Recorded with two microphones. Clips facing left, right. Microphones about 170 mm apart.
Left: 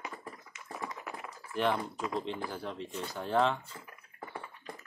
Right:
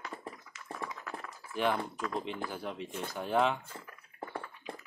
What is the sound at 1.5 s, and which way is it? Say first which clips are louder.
Speech: left 1 dB; 10° right (ahead or behind).